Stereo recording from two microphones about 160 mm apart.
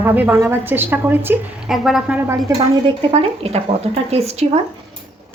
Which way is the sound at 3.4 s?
40° right (ahead or behind).